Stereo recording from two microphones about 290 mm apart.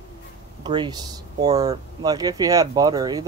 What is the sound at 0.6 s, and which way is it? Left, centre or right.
Speech, centre.